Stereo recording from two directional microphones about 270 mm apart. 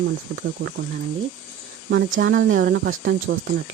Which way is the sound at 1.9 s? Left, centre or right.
Right.